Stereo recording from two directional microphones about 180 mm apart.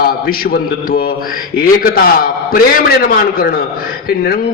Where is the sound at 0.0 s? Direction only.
55° left (ahead or behind).